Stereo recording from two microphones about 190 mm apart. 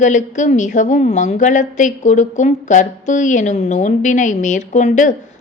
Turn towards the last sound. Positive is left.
turn(degrees=40)  # may be behind; listen again after turning